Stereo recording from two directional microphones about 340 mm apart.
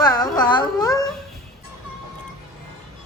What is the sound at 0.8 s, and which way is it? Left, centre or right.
Speech, centre.